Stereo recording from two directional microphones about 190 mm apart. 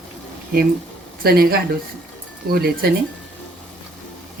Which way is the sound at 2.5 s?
55° right (ahead or behind).